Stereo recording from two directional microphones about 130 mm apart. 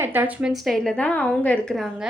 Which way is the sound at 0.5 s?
Centre (ahead or behind).